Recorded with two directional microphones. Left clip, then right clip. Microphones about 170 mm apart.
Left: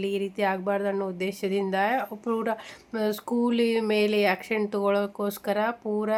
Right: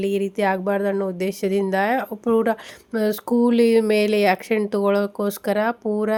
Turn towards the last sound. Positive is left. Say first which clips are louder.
# right 5 dB
turn(degrees=-30)  # may be behind; listen again after turning